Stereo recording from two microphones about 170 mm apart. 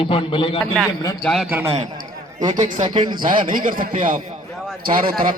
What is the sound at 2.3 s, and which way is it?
A man's voice, 50° right (ahead or behind).